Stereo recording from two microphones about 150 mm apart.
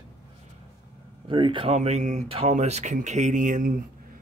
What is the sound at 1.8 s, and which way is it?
Speech, 50° right (ahead or behind).